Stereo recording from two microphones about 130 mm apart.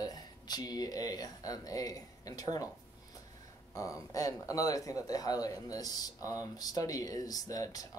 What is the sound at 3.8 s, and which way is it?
Speech, 25° left (ahead or behind).